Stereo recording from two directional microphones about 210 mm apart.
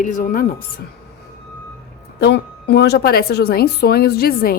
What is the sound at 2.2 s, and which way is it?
A woman's voice, 50° left (ahead or behind).